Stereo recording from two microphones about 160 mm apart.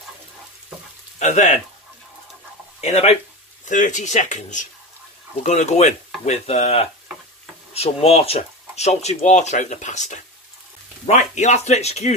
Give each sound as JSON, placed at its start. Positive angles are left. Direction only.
{"t": 1.2, "sound": "speech", "side_deg": 45}
{"t": 2.8, "sound": "speech", "side_deg": 40}
{"t": 3.6, "sound": "speech", "side_deg": 50}